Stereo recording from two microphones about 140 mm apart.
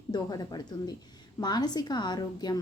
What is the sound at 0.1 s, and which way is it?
A woman's voice, 30° left (ahead or behind).